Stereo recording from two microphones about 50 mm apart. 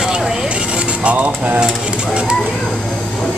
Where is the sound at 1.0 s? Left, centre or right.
Right.